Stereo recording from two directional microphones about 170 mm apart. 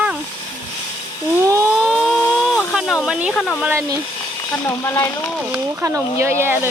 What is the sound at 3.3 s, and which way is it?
Speech, centre (ahead or behind).